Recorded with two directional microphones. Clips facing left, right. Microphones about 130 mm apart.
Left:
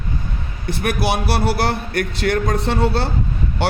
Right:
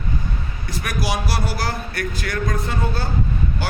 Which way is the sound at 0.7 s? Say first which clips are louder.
Left 5 dB; 60° left (ahead or behind).